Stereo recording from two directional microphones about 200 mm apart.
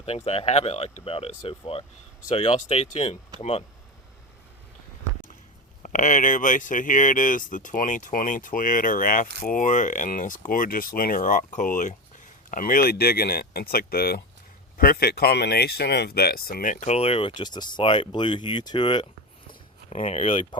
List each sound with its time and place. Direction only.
0.0 s speech: 30° left (ahead or behind)
5.8 s speech: 40° left (ahead or behind); by 19.0 s 25° left (ahead or behind)
19.9 s speech: 35° left (ahead or behind)